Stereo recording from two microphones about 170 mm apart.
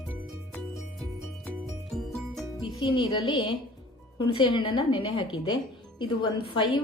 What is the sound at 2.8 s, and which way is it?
A woman's voice, 30° left (ahead or behind).